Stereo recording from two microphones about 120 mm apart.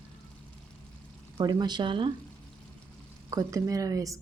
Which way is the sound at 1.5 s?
35° right (ahead or behind).